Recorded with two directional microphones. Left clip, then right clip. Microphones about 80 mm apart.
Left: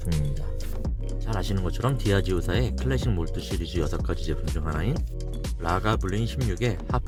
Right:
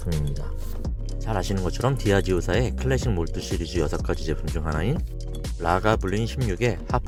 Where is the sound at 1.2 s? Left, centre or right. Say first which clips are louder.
Right 5 dB; right.